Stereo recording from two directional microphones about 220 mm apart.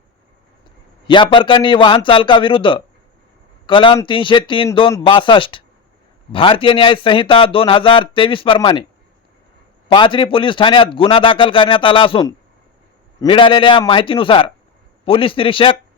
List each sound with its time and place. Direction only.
1.0 s a man's voice: 20° left (ahead or behind)
9.9 s a man's voice: 20° left (ahead or behind)